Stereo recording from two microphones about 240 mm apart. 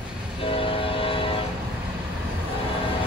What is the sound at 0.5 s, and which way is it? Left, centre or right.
Vehicle, left.